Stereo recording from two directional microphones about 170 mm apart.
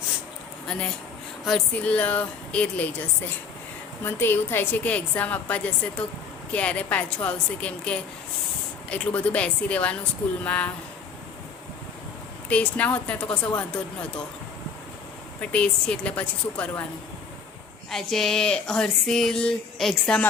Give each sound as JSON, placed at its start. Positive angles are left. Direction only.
{"t": 0.7, "sound": "a woman's voice", "side_deg": 5}
{"t": 4.0, "sound": "a woman's voice", "side_deg": 15}
{"t": 12.5, "sound": "a woman's voice", "side_deg": 10}
{"t": 13.2, "sound": "speech", "side_deg": 25}
{"t": 15.4, "sound": "a woman's voice", "side_deg": 5}
{"t": 17.9, "sound": "speech", "side_deg": 0}